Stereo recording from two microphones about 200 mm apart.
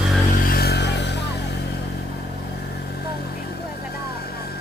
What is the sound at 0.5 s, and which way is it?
Music, 55° left (ahead or behind).